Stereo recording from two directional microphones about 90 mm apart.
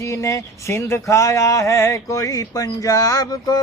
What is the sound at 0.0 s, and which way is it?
Speech, 35° left (ahead or behind).